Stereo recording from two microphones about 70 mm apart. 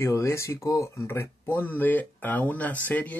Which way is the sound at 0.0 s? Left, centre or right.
Left.